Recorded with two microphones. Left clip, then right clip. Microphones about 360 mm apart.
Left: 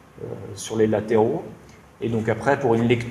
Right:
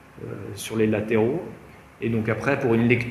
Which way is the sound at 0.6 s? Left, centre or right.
Left.